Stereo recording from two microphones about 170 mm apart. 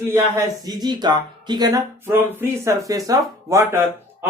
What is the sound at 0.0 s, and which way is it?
Speech, 15° right (ahead or behind).